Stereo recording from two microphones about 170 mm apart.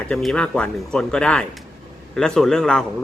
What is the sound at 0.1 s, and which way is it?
A man's voice, 5° left (ahead or behind).